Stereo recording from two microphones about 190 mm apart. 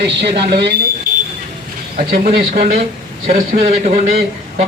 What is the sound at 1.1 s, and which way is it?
Vehicle, 45° right (ahead or behind).